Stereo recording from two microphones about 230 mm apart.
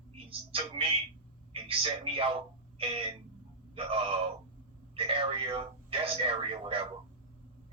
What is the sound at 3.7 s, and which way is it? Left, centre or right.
A man's voice, right.